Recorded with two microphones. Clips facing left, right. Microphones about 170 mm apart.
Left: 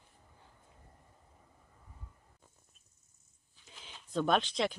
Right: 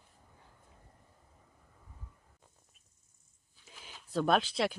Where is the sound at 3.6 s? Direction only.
5° right (ahead or behind).